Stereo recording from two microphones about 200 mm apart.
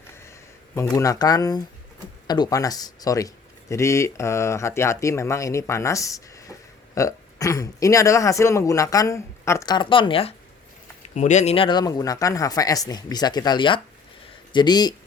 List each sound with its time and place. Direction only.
0.9 s speech: 15° left (ahead or behind)